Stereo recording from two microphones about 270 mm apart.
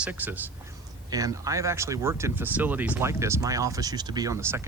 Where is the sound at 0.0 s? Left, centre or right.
Centre.